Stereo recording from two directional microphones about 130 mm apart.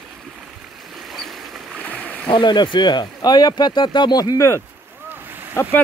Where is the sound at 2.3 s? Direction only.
35° left (ahead or behind); by 5.8 s 20° left (ahead or behind).